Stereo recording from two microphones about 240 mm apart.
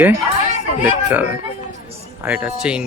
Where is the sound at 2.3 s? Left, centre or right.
Centre.